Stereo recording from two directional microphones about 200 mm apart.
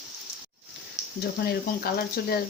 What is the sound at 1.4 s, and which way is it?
Speech, 50° left (ahead or behind).